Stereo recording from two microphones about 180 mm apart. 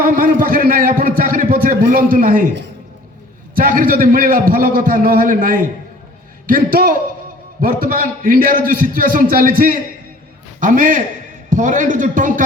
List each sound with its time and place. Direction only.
0.0 s a sound: 50° right (ahead or behind)
1.9 s a man's voice: 50° right (ahead or behind)
3.5 s a man's voice: 50° right (ahead or behind)